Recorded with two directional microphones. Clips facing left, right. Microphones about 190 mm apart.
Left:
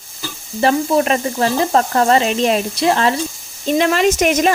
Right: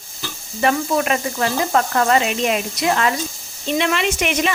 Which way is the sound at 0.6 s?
30° left (ahead or behind).